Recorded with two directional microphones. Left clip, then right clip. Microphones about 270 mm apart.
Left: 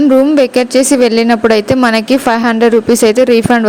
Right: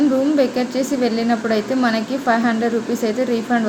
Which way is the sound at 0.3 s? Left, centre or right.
Left.